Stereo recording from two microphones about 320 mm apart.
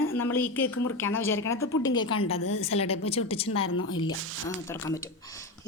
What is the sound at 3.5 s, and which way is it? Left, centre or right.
Speech, left.